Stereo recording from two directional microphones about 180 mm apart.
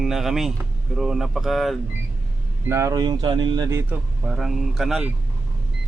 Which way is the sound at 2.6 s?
15° right (ahead or behind).